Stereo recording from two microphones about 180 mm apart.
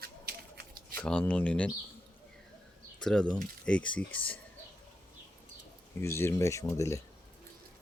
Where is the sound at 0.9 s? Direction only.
10° left (ahead or behind).